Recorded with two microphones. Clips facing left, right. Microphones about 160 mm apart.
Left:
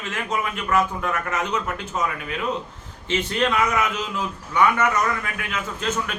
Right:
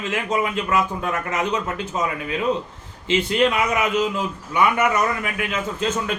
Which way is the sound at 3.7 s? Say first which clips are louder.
Right 4 dB; 15° right (ahead or behind).